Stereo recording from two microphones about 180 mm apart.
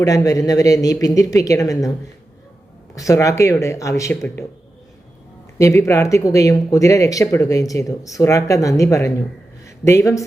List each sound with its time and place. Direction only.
0.0 s speech: 20° left (ahead or behind)
2.9 s speech: 20° left (ahead or behind)
5.5 s a woman's voice: 15° left (ahead or behind)